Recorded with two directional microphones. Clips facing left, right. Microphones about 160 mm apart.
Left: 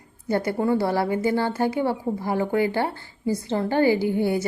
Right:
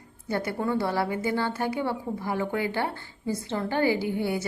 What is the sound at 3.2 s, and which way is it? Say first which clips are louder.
Speech: left 5 dB; 35° left (ahead or behind).